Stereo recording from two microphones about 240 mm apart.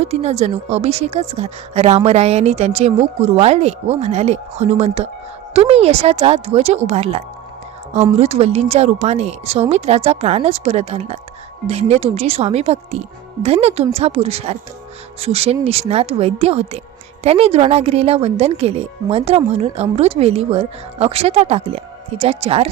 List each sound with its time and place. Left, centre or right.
0.0 s speech: right